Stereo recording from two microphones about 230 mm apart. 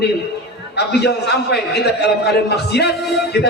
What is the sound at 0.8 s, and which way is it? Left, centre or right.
A man's voice, left.